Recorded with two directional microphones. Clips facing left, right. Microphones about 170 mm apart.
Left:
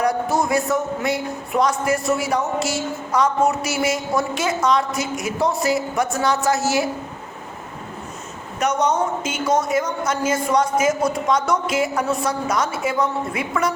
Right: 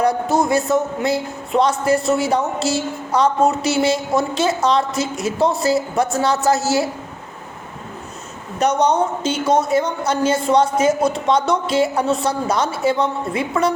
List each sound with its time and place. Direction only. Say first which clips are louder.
0.0 s a man's voice: right 3 dB; 25° right (ahead or behind)
8.5 s speech: right 3 dB; 35° right (ahead or behind)